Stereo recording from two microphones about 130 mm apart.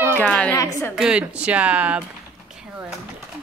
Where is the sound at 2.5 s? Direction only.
5° right (ahead or behind).